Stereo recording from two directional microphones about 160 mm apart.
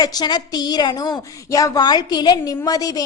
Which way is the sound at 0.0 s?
25° left (ahead or behind).